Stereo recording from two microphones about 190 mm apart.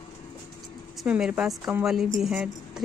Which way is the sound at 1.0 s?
5° right (ahead or behind).